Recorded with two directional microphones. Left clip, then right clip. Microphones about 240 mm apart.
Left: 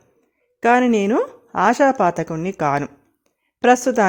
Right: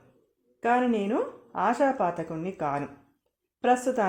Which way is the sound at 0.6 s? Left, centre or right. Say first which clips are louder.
Left 9 dB; left.